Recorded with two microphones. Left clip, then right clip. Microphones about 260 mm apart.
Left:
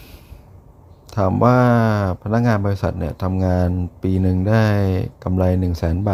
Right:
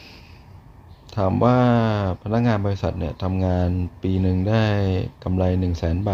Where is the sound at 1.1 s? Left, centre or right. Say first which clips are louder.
Left 3 dB; centre.